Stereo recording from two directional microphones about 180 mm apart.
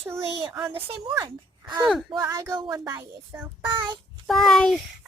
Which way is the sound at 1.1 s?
20° right (ahead or behind).